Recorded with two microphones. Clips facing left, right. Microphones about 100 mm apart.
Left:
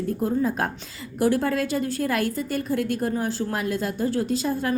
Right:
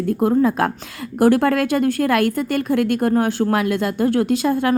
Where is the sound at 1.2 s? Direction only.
65° right (ahead or behind).